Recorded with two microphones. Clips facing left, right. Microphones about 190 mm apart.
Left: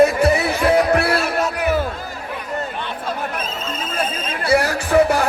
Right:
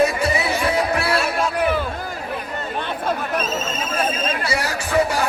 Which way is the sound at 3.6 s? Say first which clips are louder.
Right 2 dB; 60° left (ahead or behind).